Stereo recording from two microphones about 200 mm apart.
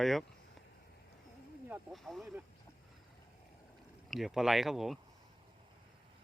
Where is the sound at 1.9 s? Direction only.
Centre (ahead or behind).